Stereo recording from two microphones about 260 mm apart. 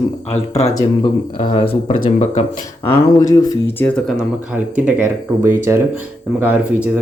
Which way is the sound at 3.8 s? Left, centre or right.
Centre.